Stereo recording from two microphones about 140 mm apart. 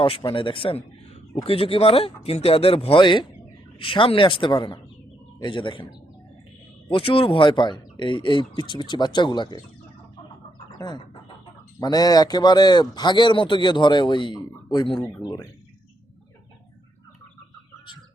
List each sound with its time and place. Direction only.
0.0 s a man's voice: 35° left (ahead or behind)
6.8 s a man's voice: 40° left (ahead or behind)
10.8 s a man's voice: 30° left (ahead or behind)